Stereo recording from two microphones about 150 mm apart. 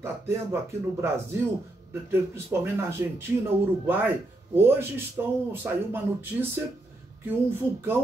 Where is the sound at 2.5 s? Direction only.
15° right (ahead or behind).